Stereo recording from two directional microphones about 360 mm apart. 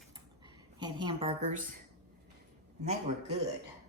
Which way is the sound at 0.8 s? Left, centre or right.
Centre.